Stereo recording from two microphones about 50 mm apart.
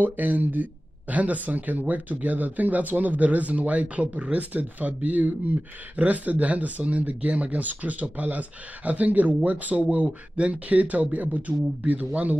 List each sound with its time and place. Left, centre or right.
0.0 s speech: right